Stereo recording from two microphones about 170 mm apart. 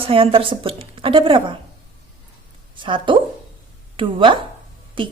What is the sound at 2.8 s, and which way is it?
A woman's voice, 30° right (ahead or behind).